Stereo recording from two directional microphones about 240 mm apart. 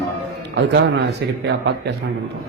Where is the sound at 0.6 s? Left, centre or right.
Right.